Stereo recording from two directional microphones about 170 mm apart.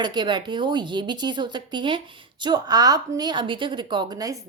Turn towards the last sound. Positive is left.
turn(degrees=-20)  # may be behind; listen again after turning